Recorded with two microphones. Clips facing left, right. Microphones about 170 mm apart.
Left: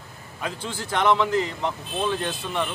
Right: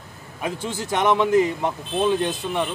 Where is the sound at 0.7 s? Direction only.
20° right (ahead or behind).